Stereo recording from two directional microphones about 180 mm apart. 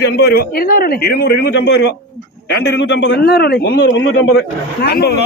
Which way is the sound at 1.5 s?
75° left (ahead or behind).